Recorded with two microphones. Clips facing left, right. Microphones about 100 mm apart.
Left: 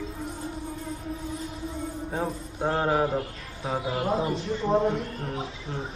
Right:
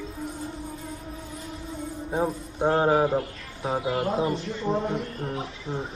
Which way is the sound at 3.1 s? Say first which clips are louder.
Right 3 dB; 30° right (ahead or behind).